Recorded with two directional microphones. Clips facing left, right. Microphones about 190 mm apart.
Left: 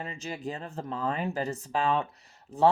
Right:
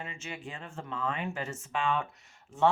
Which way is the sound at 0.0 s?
35° left (ahead or behind).